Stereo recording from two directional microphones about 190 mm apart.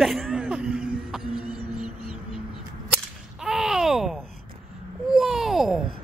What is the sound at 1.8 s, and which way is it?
Music, 30° left (ahead or behind).